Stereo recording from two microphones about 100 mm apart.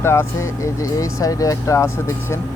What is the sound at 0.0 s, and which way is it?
Speech, 25° left (ahead or behind).